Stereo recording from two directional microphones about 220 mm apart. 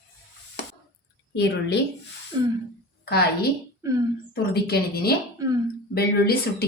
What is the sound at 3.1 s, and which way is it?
Speech, 45° left (ahead or behind).